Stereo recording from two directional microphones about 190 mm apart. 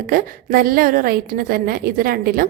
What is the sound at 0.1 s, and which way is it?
A woman's voice, 50° right (ahead or behind).